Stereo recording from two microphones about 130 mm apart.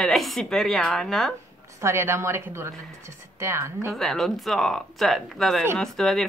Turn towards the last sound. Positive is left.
turn(degrees=0)  # may be behind; listen again after turning